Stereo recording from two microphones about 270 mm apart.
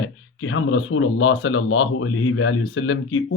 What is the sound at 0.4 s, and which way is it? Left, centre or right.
Speech, left.